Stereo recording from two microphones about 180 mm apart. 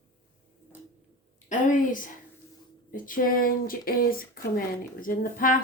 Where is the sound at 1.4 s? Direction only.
45° left (ahead or behind).